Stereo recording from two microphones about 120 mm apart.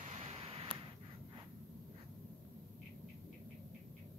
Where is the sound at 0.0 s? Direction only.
65° right (ahead or behind).